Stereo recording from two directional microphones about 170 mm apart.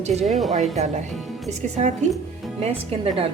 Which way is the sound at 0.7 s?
40° right (ahead or behind).